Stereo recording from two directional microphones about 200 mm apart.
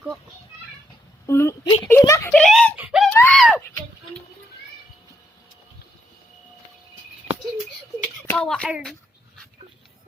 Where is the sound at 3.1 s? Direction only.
10° left (ahead or behind).